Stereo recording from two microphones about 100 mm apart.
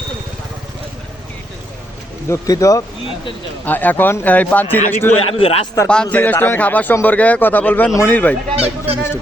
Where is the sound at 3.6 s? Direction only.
20° left (ahead or behind).